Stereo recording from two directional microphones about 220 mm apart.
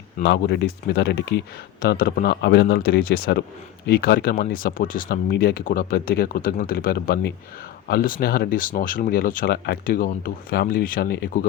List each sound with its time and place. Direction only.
0.2 s speech: 50° left (ahead or behind)